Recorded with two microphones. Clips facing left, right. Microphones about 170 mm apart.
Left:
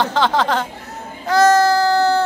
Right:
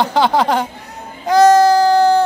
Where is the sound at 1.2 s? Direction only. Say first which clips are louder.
Right 4 dB; 15° right (ahead or behind).